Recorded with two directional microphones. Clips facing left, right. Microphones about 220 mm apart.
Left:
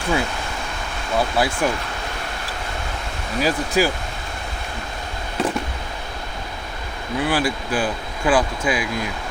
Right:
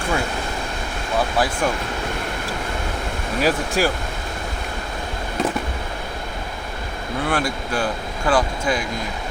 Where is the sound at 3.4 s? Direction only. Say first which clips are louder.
Even; centre (ahead or behind).